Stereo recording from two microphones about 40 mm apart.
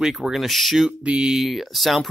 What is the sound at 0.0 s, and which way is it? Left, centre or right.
Speech, centre.